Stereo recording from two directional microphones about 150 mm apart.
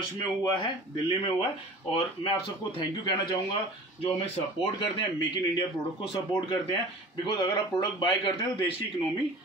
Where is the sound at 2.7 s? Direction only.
30° left (ahead or behind).